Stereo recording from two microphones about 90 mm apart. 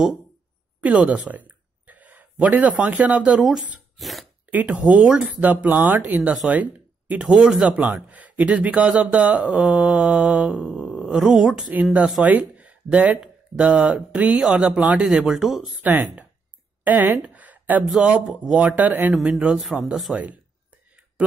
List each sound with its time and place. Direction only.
0.8 s speech: 15° right (ahead or behind)
3.3 s speech: 5° right (ahead or behind)
4.5 s speech: 15° right (ahead or behind)
15.7 s speech: 20° right (ahead or behind)
16.8 s a sound: 20° right (ahead or behind)
17.8 s speech: 10° right (ahead or behind)
19.1 s speech: 10° right (ahead or behind)